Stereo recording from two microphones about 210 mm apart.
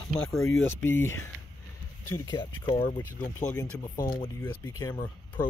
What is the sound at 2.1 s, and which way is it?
Speech, 20° left (ahead or behind).